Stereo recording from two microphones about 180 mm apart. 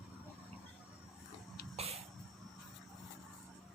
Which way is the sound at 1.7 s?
35° right (ahead or behind).